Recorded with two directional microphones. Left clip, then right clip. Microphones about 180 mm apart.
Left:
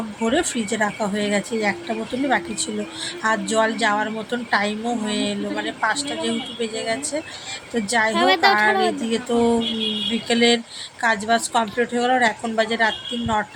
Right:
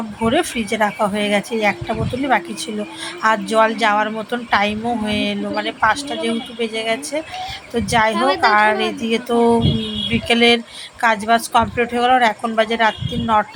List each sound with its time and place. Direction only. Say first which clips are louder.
0.2 s a woman's voice: right 4 dB; 5° right (ahead or behind)
3.2 s a woman's voice: right 5 dB; 5° right (ahead or behind)
8.1 s a woman's voice: even; 15° left (ahead or behind)
8.4 s a woman's voice: right 2 dB; 10° right (ahead or behind)